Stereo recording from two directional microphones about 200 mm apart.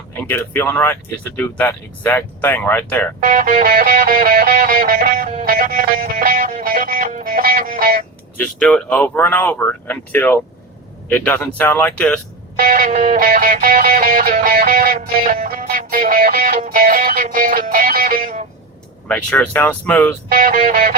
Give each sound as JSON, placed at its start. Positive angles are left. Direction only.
{"t": 0.3, "sound": "speech", "side_deg": 10}
{"t": 3.2, "sound": "music", "side_deg": -40}
{"t": 8.5, "sound": "speech", "side_deg": 5}
{"t": 12.5, "sound": "music", "side_deg": -40}
{"t": 19.0, "sound": "speech", "side_deg": 10}
{"t": 20.3, "sound": "music", "side_deg": -45}